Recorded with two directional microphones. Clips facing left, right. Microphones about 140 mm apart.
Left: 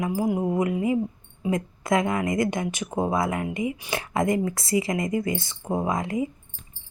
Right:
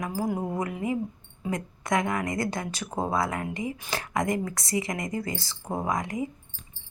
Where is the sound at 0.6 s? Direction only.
20° left (ahead or behind).